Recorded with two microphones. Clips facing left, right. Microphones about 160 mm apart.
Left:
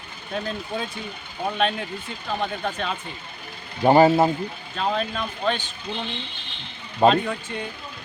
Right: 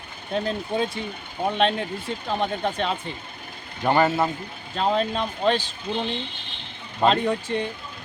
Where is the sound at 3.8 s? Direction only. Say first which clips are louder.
Left 5 dB; 30° left (ahead or behind).